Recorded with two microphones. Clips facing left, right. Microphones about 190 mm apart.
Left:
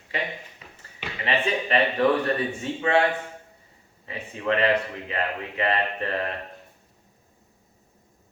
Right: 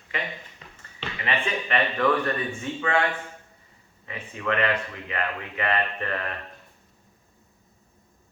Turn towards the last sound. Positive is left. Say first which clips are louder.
# left 3 dB
turn(degrees=30)  # may be behind; listen again after turning